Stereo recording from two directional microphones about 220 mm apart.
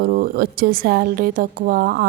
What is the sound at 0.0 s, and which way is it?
A woman's voice, 40° right (ahead or behind).